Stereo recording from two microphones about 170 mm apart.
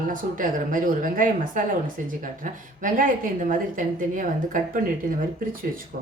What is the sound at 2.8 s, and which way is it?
A woman's voice, 50° right (ahead or behind).